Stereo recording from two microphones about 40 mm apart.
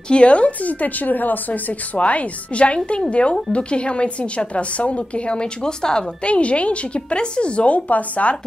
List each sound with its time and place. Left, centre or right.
0.1 s a woman's voice: left
6.2 s a woman's voice: left